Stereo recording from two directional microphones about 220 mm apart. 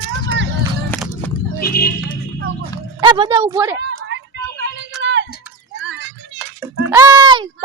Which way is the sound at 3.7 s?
55° right (ahead or behind).